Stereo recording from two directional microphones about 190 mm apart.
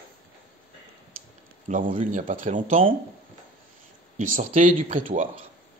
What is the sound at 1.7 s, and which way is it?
Speech, 45° right (ahead or behind).